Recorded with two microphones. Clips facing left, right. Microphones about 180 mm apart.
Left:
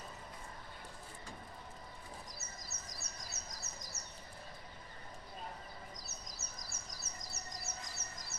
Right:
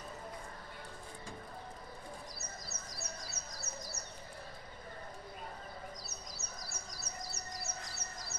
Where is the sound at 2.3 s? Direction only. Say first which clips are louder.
Right 4 dB; 45° left (ahead or behind).